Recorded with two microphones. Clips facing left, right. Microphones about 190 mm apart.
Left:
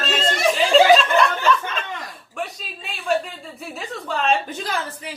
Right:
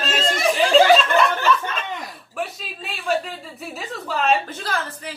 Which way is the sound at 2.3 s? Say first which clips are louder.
Right 1 dB; 5° right (ahead or behind).